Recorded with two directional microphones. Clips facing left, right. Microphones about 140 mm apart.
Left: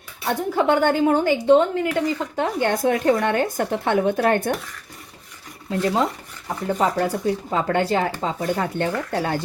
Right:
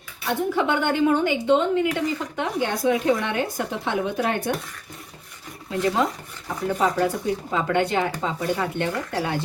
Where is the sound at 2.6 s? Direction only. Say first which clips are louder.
Left 2 dB; 50° left (ahead or behind).